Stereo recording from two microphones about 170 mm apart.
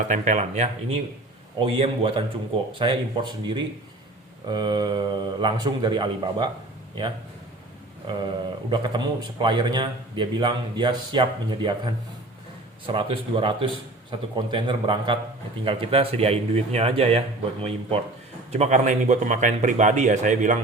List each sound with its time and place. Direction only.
0.1 s a man's voice: 45° right (ahead or behind); by 6.5 s 25° right (ahead or behind)
8.0 s speech: 30° right (ahead or behind)
12.8 s a man's voice: 30° right (ahead or behind); by 20.6 s 45° right (ahead or behind)